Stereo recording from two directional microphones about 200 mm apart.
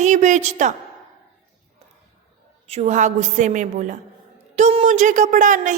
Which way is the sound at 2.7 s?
35° right (ahead or behind).